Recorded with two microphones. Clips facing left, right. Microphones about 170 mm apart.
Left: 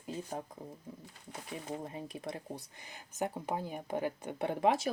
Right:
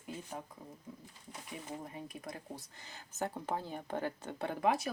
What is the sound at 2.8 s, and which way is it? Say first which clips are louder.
Speech: left 2 dB; 15° left (ahead or behind).